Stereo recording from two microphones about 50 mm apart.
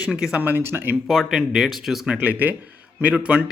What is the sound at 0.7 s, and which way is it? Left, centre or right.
Speech, right.